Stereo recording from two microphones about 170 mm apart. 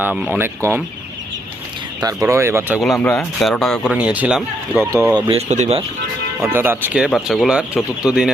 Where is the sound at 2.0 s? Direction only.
20° right (ahead or behind).